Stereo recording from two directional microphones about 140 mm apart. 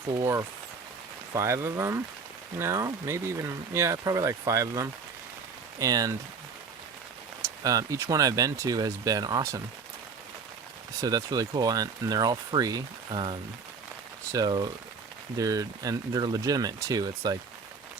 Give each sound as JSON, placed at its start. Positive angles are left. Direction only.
{"t": 0.2, "sound": "speech", "side_deg": -20}
{"t": 7.4, "sound": "speech", "side_deg": -25}
{"t": 11.0, "sound": "speech", "side_deg": -25}
{"t": 14.3, "sound": "speech", "side_deg": -30}